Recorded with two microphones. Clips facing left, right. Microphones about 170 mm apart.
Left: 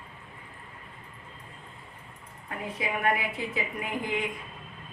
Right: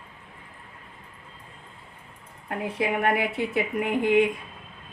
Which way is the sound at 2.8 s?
65° right (ahead or behind).